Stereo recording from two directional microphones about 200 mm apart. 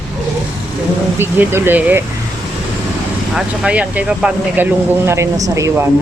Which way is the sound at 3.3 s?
5° right (ahead or behind).